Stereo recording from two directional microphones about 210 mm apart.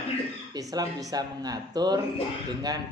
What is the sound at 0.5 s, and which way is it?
A man's voice, 15° right (ahead or behind).